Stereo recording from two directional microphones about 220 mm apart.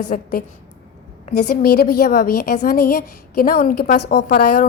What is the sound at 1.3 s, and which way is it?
A woman's voice, 45° left (ahead or behind).